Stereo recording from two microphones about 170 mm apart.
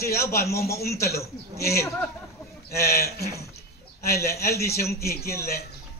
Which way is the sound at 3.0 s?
65° left (ahead or behind).